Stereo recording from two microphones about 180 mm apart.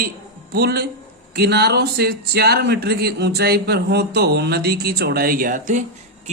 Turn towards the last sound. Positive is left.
turn(degrees=-40)  # may be behind; listen again after turning